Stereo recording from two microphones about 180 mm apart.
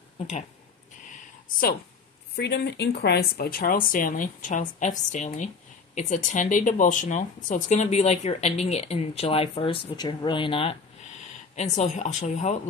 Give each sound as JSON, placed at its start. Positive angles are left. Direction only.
{"t": 2.3, "sound": "speech", "side_deg": 65}